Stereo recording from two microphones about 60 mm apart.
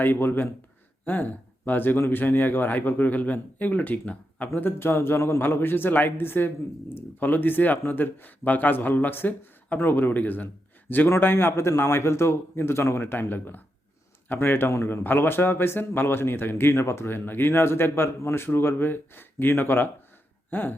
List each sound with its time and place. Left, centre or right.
0.0 s a man's voice: left